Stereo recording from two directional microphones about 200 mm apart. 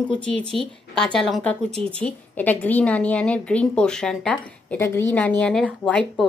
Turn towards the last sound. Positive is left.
turn(degrees=0)  # may be behind; listen again after turning